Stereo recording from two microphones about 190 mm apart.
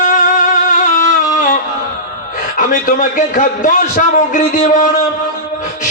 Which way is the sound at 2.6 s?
45° left (ahead or behind).